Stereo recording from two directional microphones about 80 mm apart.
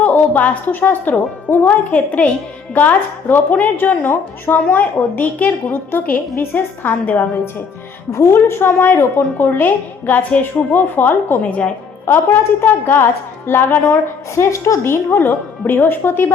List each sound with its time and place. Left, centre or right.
0.0 s a woman's voice: left
8.1 s a woman's voice: left
12.0 s a woman's voice: left
14.3 s a woman's voice: left